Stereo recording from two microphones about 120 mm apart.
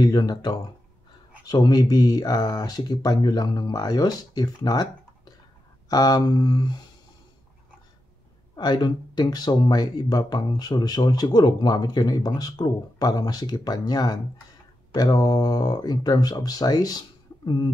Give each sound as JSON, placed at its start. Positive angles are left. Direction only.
{"t": 0.0, "sound": "speech", "side_deg": 35}
{"t": 8.5, "sound": "speech", "side_deg": 35}